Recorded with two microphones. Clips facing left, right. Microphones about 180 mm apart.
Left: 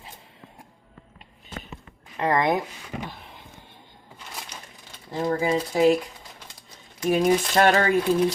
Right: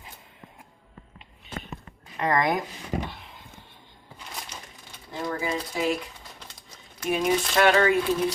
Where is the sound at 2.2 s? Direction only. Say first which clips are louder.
Left 2 dB; 25° left (ahead or behind).